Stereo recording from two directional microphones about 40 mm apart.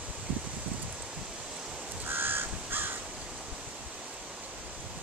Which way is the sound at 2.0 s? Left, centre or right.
Right.